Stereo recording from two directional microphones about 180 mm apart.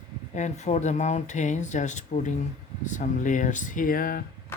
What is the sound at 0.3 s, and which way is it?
Speech, 40° left (ahead or behind).